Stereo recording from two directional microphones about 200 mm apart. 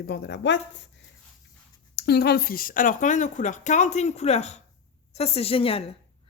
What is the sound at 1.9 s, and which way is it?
A woman's voice, 55° left (ahead or behind).